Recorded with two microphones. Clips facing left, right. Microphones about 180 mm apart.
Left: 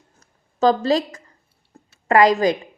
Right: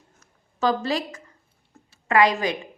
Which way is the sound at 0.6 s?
40° left (ahead or behind).